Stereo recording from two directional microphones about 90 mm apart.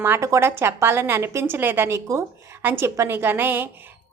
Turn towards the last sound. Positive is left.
turn(degrees=-25)  # may be behind; listen again after turning